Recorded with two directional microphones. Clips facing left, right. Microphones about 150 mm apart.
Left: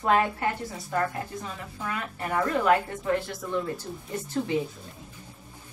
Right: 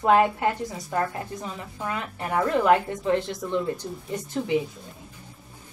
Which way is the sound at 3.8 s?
5° right (ahead or behind).